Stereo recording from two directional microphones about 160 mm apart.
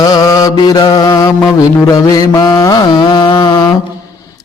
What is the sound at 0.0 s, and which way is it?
Mantra, 25° left (ahead or behind).